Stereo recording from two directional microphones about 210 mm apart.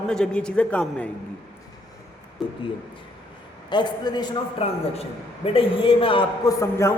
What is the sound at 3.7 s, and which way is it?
A man's voice, 20° left (ahead or behind).